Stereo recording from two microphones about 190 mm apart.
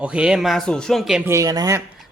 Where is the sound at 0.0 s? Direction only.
5° right (ahead or behind).